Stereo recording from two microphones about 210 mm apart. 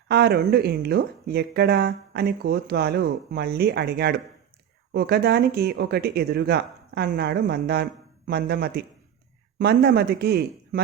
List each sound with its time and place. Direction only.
0.1 s speech: 50° right (ahead or behind)